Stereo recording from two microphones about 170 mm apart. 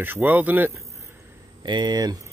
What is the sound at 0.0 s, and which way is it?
Speech, 10° right (ahead or behind).